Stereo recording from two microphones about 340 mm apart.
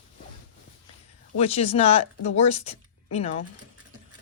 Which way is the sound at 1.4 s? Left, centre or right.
Centre.